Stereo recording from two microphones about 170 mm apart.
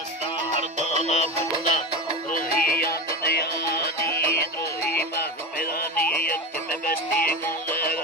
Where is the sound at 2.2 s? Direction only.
55° left (ahead or behind).